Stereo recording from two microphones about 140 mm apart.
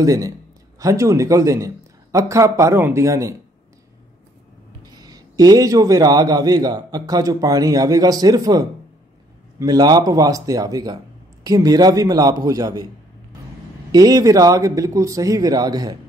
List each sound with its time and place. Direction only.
0.0 s a man's voice: 25° right (ahead or behind)
4.8 s a man's voice: 25° right (ahead or behind)
13.9 s a man's voice: 25° right (ahead or behind)